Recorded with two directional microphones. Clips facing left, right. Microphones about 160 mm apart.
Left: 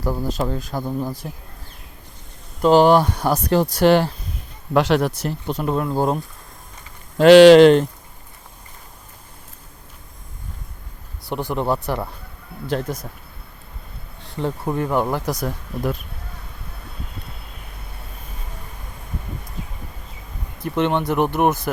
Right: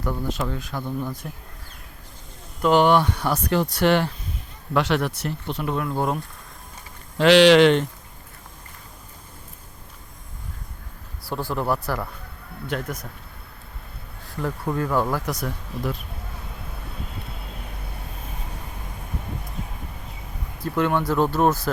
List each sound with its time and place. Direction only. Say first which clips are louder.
0.0 s speech: left 4 dB; 35° left (ahead or behind)
2.6 s speech: left 4 dB; 30° left (ahead or behind)
7.2 s speech: left 6 dB; 45° left (ahead or behind)
11.3 s speech: left 3 dB; 20° left (ahead or behind)
14.3 s speech: left 3 dB; 25° left (ahead or behind)
15.3 s speech: left 4 dB; 40° left (ahead or behind)
20.6 s speech: left 2 dB; 20° left (ahead or behind)